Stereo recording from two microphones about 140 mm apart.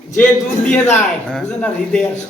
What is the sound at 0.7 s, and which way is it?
Speech, 15° left (ahead or behind).